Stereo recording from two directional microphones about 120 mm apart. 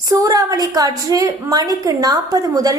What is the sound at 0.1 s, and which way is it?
A woman's voice, 30° right (ahead or behind).